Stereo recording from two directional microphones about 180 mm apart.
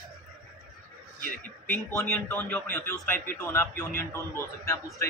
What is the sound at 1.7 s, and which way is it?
A man's voice, 15° left (ahead or behind).